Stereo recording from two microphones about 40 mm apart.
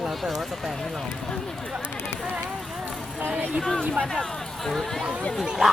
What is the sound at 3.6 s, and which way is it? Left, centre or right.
Speech, centre.